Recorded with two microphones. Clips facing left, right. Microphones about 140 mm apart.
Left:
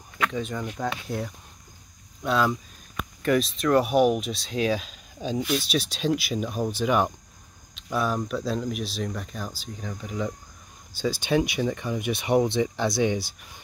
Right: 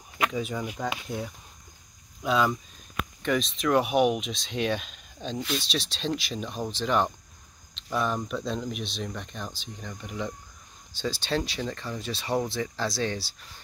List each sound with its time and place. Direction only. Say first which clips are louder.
0.2 s speech: even; 5° right (ahead or behind); by 13.6 s 15° left (ahead or behind)